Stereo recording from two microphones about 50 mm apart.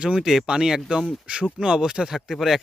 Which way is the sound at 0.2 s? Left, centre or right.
Centre.